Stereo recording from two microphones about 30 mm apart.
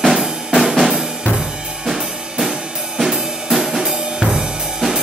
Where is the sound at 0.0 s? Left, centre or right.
Centre.